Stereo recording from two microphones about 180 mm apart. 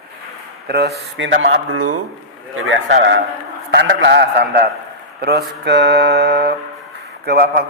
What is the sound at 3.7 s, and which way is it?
A man's voice, 75° right (ahead or behind).